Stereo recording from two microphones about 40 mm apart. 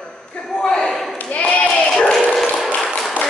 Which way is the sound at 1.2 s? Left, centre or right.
Left.